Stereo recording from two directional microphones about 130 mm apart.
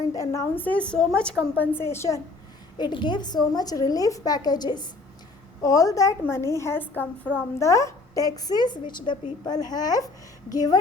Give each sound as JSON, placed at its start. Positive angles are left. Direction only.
{"t": 0.1, "sound": "a woman's voice", "side_deg": 25}
{"t": 2.7, "sound": "a woman's voice", "side_deg": 35}